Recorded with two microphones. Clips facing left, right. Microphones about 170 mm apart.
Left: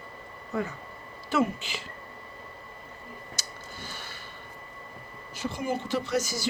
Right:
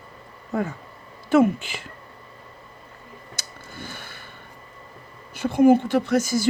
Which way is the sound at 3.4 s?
55° right (ahead or behind).